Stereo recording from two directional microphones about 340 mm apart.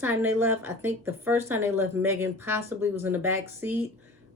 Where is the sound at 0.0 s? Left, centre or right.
Centre.